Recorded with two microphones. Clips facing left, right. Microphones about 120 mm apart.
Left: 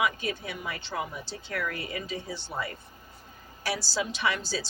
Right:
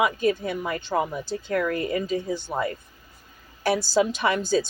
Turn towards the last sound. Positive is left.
turn(degrees=-50)  # may be behind; listen again after turning